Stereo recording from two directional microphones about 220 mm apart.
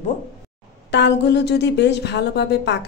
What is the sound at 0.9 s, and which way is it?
A woman's voice, 50° left (ahead or behind).